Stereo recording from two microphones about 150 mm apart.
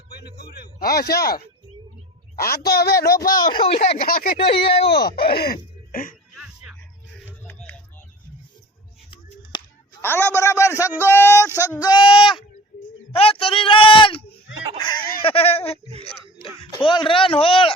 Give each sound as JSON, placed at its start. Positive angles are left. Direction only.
{"t": 0.3, "sound": "speech", "side_deg": 90}
{"t": 2.3, "sound": "speech", "side_deg": 80}
{"t": 3.1, "sound": "speech", "side_deg": 25}
{"t": 4.0, "sound": "speech", "side_deg": 80}
{"t": 4.4, "sound": "speech", "side_deg": 40}
{"t": 5.0, "sound": "speech", "side_deg": 90}
{"t": 6.3, "sound": "music", "side_deg": -5}
{"t": 7.3, "sound": "a sound", "side_deg": 10}
{"t": 10.0, "sound": "a man's voice", "side_deg": 15}